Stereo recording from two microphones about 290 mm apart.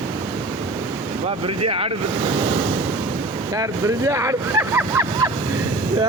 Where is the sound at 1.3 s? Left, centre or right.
Centre.